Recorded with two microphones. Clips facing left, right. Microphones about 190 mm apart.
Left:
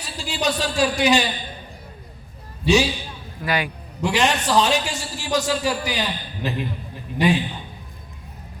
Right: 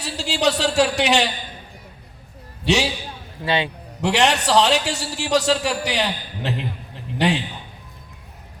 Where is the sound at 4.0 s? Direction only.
70° right (ahead or behind).